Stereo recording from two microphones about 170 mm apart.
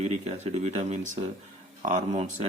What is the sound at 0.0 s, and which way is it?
Speech, 40° right (ahead or behind).